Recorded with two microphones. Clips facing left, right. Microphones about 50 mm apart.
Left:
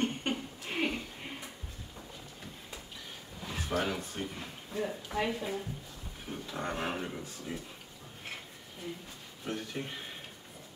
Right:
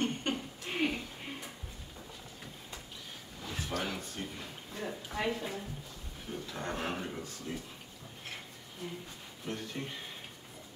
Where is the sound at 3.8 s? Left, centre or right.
Centre.